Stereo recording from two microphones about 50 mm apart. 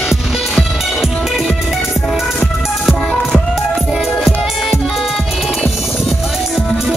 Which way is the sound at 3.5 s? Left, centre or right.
Centre.